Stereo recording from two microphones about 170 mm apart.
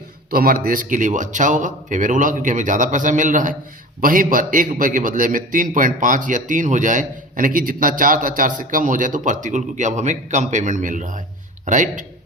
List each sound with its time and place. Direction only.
0.3 s a man's voice: 60° right (ahead or behind)